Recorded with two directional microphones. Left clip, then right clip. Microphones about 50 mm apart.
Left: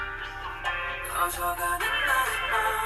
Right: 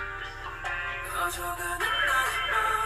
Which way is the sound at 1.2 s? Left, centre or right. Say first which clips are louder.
Left 3 dB; left.